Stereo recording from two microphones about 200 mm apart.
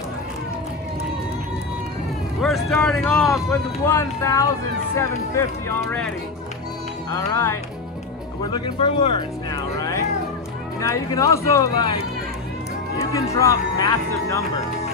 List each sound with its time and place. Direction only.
2.4 s speech: centre (ahead or behind)
13.0 s speech: 15° left (ahead or behind)